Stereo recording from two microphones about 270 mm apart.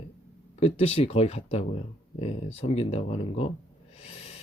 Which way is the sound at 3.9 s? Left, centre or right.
Left.